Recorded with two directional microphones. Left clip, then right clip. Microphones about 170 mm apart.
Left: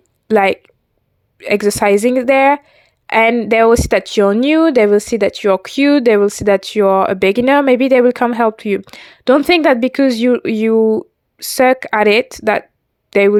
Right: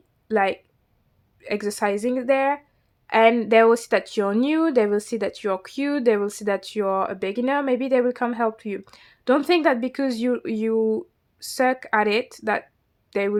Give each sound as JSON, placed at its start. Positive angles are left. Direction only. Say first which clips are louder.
{"t": 0.3, "sound": "a woman's voice", "louder": "left 9 dB", "side_deg": 50}